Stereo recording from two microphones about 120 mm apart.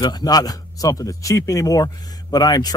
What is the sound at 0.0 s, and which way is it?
A man's voice, 35° left (ahead or behind).